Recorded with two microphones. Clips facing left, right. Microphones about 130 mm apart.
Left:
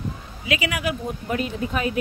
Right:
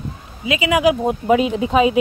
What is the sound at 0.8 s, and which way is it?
Speech, 90° right.